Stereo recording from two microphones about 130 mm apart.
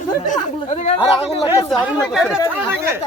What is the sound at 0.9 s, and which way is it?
Speech, 40° left (ahead or behind).